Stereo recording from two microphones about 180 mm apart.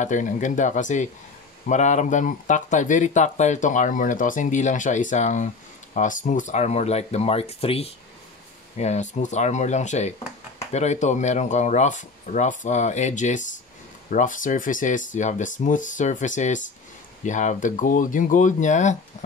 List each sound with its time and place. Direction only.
0.0 s speech: 45° left (ahead or behind)